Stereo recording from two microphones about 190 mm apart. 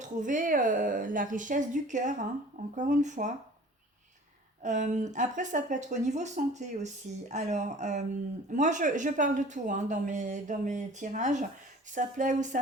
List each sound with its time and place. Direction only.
0.0 s speech: 40° right (ahead or behind)
4.6 s speech: 40° right (ahead or behind)